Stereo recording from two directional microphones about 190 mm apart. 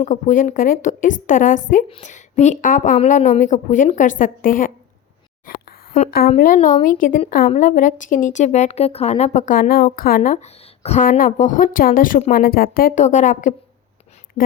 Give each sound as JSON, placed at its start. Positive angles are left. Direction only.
{"t": 0.0, "sound": "a woman's voice", "side_deg": 45}
{"t": 6.3, "sound": "a woman's voice", "side_deg": 40}